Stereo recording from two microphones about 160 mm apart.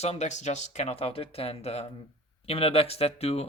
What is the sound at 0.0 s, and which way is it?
Speech, 45° left (ahead or behind).